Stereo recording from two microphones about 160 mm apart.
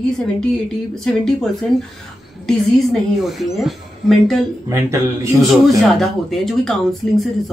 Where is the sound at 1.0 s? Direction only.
5° left (ahead or behind).